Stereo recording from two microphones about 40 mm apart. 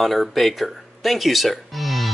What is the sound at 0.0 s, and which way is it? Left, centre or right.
Speech, centre.